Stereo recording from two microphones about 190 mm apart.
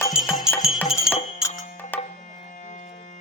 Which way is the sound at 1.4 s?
5° right (ahead or behind).